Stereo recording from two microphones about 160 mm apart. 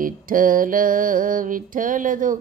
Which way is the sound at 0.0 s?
60° right (ahead or behind).